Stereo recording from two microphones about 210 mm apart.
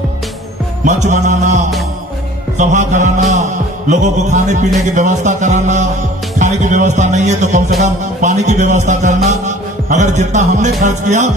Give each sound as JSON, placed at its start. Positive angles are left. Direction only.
{"t": 0.8, "sound": "music", "side_deg": -35}